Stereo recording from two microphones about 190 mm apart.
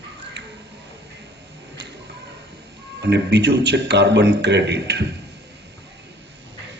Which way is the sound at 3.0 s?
60° right (ahead or behind).